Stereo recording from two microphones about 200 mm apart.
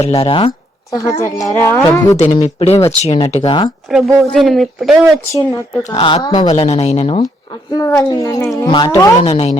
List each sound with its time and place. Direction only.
0.0 s speech: 30° left (ahead or behind); by 2.1 s 15° left (ahead or behind)
2.4 s speech: 30° left (ahead or behind)
3.8 s speech: centre (ahead or behind)
5.3 s speech: 15° left (ahead or behind)
6.0 s speech: 25° left (ahead or behind)
6.5 s speech: 30° left (ahead or behind)
7.7 s speech: 15° left (ahead or behind)
9.3 s speech: 35° left (ahead or behind)